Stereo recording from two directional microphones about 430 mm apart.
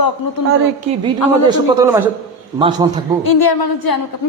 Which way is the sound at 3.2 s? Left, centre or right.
Left.